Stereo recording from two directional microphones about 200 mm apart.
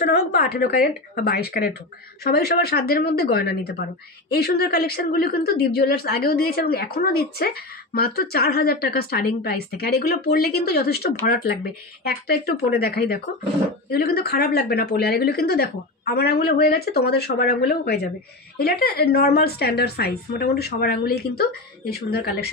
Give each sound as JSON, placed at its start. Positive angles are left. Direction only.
{"t": 0.0, "sound": "speech", "side_deg": 50}